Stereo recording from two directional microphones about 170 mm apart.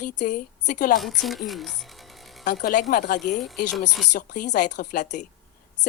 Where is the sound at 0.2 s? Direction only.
50° left (ahead or behind).